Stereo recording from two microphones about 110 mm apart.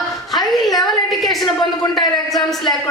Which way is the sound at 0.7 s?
35° left (ahead or behind).